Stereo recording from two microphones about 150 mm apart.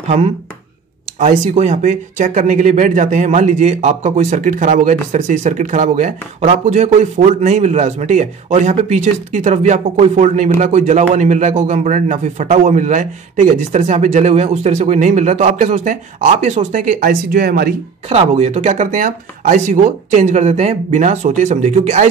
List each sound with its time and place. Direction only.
1.2 s speech: 50° right (ahead or behind)
17.0 s speech: 90° right
18.0 s speech: 45° right (ahead or behind)